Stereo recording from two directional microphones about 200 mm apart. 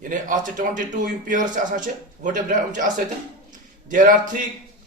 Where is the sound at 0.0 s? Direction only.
40° right (ahead or behind).